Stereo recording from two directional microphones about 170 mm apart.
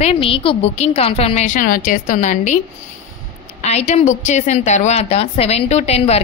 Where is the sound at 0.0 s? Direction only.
35° left (ahead or behind).